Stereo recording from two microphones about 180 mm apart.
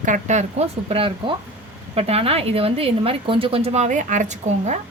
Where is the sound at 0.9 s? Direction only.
30° right (ahead or behind).